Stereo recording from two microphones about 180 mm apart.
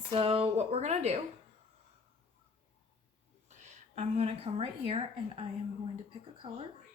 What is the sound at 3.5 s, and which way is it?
A woman's voice, 40° right (ahead or behind).